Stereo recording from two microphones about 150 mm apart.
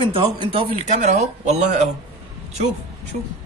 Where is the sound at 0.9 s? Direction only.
50° right (ahead or behind).